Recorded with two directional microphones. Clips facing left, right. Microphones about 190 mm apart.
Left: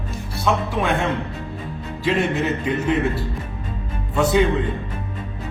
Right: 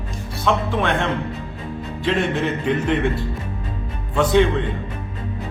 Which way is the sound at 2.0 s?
5° left (ahead or behind).